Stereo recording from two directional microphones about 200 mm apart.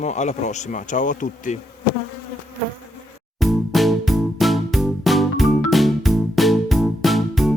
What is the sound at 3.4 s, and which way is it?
Music, centre (ahead or behind).